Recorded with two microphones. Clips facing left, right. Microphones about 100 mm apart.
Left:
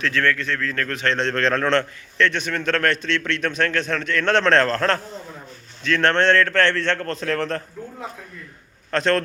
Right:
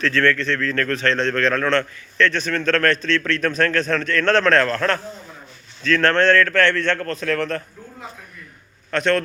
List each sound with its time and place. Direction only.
0.0 s a man's voice: 15° left (ahead or behind); by 4.9 s 30° left (ahead or behind)
5.8 s a man's voice: 20° left (ahead or behind)
8.9 s a man's voice: 30° left (ahead or behind)